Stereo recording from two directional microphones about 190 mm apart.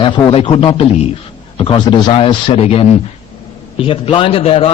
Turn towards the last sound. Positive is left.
turn(degrees=30)  # may be behind; listen again after turning